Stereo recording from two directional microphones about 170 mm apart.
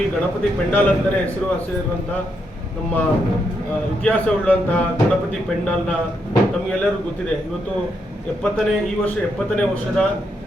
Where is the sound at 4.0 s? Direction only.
10° left (ahead or behind).